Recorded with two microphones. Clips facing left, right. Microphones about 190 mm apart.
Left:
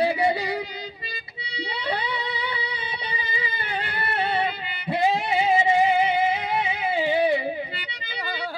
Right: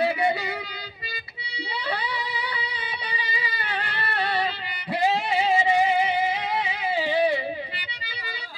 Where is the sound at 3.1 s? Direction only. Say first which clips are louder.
Even; 25° left (ahead or behind).